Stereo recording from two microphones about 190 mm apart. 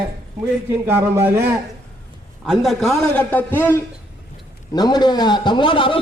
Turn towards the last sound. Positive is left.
turn(degrees=25)  # may be behind; listen again after turning